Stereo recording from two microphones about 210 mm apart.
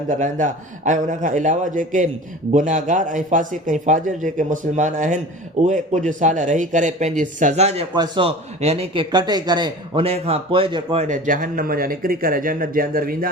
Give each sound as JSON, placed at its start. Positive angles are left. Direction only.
{"t": 0.1, "sound": "speech", "side_deg": -35}
{"t": 7.9, "sound": "speech", "side_deg": -20}
{"t": 11.1, "sound": "speech", "side_deg": -40}